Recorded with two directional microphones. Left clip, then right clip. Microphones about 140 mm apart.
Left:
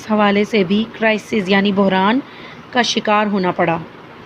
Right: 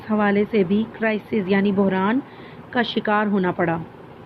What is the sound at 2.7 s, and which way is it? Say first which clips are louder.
Speech: left 6 dB; 25° left (ahead or behind).